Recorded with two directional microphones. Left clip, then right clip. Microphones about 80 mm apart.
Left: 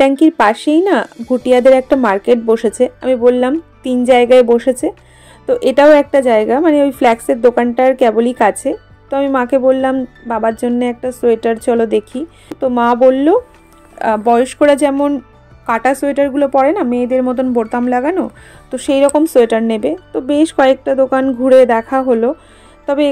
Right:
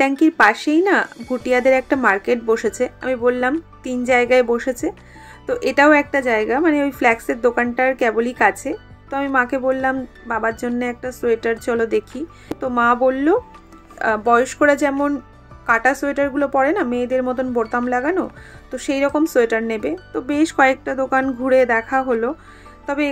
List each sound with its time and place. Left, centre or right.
0.0 s a woman's voice: left
2.4 s a woman's voice: left
9.9 s speech: left
13.9 s a woman's voice: left
15.0 s speech: left
15.6 s a woman's voice: left
20.1 s speech: left
21.5 s speech: left